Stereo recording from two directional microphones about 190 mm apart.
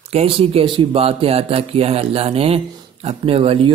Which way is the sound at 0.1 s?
30° right (ahead or behind).